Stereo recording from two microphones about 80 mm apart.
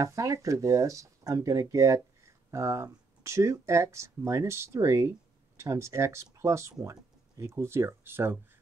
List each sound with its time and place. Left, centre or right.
0.0 s speech: right